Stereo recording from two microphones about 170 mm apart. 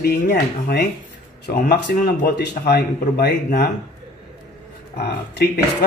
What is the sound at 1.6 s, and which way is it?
Speech, 90° left.